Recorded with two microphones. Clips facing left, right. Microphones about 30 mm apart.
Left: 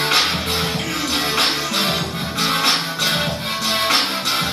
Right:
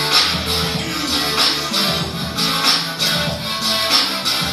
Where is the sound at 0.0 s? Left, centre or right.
Right.